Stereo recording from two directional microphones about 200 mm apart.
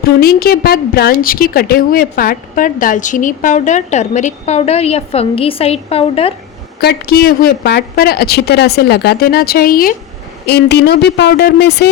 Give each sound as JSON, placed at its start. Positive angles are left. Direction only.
{"t": 0.2, "sound": "a woman's voice", "side_deg": 50}
{"t": 6.8, "sound": "a woman's voice", "side_deg": 50}